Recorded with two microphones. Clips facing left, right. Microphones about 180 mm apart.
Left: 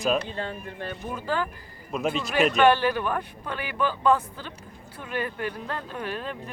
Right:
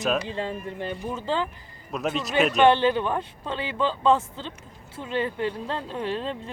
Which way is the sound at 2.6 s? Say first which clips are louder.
Right 3 dB; 20° right (ahead or behind).